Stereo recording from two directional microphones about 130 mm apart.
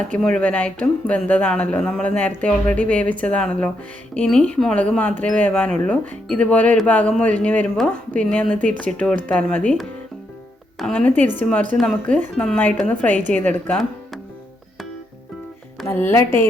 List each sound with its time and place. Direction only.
0.2 s a woman's voice: 5° left (ahead or behind)
10.9 s a woman's voice: 10° left (ahead or behind)
15.9 s a woman's voice: 15° left (ahead or behind)